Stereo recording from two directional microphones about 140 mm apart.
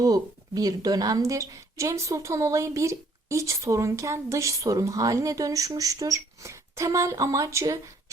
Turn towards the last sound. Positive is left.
turn(degrees=-25)  # may be behind; listen again after turning